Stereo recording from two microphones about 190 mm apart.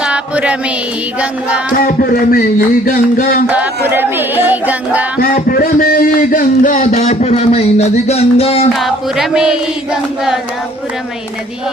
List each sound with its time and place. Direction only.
0.0 s music: 5° right (ahead or behind)
1.2 s chant: 5° right (ahead or behind)
1.8 s speech: 50° left (ahead or behind)
3.4 s speech: 10° right (ahead or behind)
5.2 s music: 50° left (ahead or behind); by 8.7 s 30° left (ahead or behind)
8.7 s chant: centre (ahead or behind)